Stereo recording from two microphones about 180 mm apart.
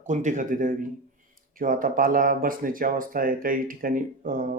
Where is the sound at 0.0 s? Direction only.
45° right (ahead or behind).